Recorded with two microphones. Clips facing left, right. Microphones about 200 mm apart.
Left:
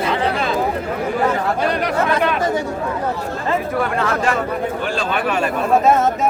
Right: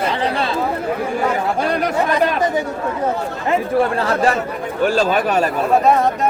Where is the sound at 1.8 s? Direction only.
40° right (ahead or behind).